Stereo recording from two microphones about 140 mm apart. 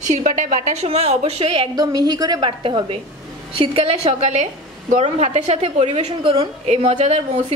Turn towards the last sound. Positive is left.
turn(degrees=-55)  # may be behind; listen again after turning